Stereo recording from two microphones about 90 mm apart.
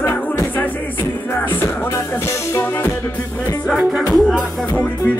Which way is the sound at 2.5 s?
30° left (ahead or behind).